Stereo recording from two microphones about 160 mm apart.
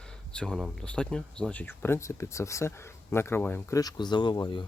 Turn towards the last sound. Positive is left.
turn(degrees=30)  # may be behind; listen again after turning